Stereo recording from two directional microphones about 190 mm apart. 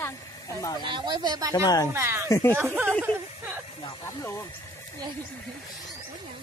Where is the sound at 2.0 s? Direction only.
15° right (ahead or behind).